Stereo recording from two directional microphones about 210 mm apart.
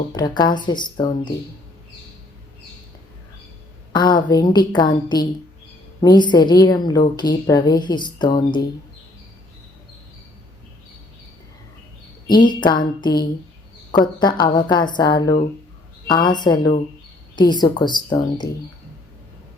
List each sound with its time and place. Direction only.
0.1 s a woman's voice: 20° left (ahead or behind)
3.9 s a woman's voice: 20° left (ahead or behind)
12.3 s a woman's voice: 20° left (ahead or behind)